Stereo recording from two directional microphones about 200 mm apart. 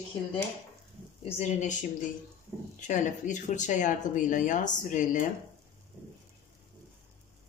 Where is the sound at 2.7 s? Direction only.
40° left (ahead or behind).